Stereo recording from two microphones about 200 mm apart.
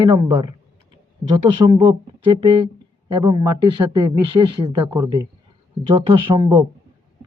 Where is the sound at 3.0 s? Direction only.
25° right (ahead or behind).